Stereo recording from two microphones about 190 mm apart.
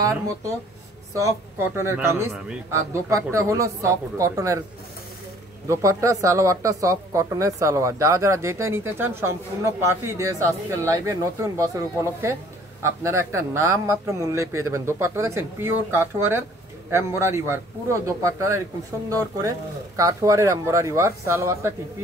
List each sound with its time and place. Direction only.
1.1 s speech: 15° right (ahead or behind)
5.7 s speech: 15° right (ahead or behind)